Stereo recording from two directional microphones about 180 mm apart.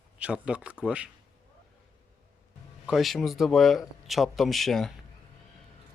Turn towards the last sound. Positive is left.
turn(degrees=0)  # may be behind; listen again after turning